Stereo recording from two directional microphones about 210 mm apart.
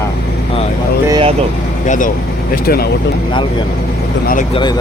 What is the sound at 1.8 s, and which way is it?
Speech, 40° left (ahead or behind).